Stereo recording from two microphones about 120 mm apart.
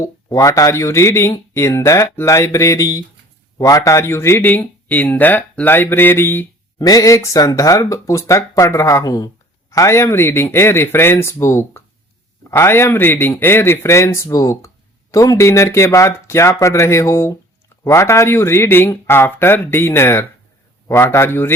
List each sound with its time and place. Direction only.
0.0 s speech: 25° left (ahead or behind)
6.7 s speech: 30° left (ahead or behind)